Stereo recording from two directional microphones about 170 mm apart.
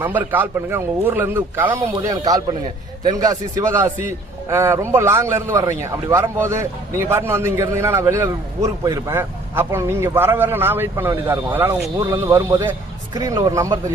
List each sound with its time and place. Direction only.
0.0 s a man's voice: 10° right (ahead or behind)